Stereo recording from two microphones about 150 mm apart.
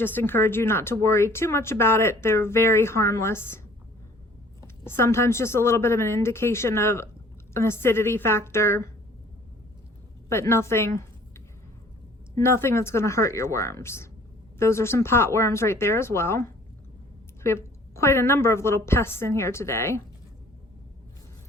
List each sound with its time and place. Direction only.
0.0 s speech: 15° left (ahead or behind)
4.6 s speech: 15° left (ahead or behind)
10.2 s a woman's voice: 20° left (ahead or behind)
17.4 s speech: 20° left (ahead or behind)